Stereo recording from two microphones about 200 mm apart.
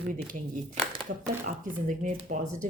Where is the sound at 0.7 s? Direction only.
35° right (ahead or behind).